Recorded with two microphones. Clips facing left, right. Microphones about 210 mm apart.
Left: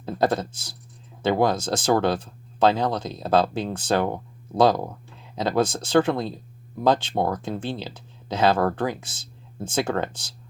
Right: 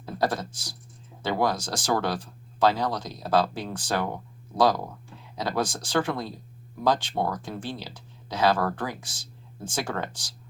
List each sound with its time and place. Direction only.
0.0 s speech: 25° left (ahead or behind)